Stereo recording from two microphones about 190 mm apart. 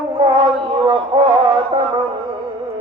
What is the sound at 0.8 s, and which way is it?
Music, 25° right (ahead or behind).